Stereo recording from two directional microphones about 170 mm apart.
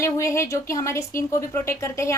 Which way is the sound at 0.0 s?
15° left (ahead or behind).